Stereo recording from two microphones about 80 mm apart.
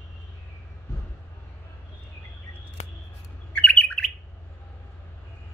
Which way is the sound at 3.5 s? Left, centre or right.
Centre.